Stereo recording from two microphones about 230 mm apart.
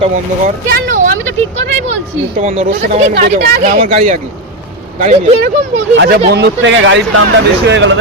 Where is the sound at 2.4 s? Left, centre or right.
Right.